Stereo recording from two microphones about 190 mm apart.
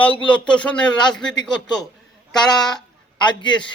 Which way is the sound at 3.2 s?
25° left (ahead or behind).